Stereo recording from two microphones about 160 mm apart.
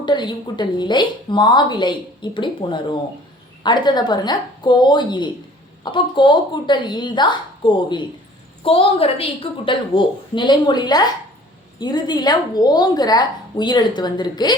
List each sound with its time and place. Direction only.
0.0 s a woman's voice: 30° left (ahead or behind)